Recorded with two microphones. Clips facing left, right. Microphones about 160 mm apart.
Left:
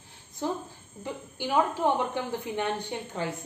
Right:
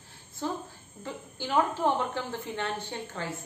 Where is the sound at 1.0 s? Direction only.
15° left (ahead or behind).